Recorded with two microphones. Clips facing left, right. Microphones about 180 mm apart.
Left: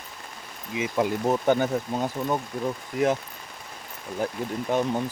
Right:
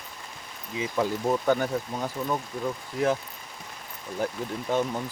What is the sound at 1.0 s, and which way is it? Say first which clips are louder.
Speech: left 2 dB; 20° left (ahead or behind).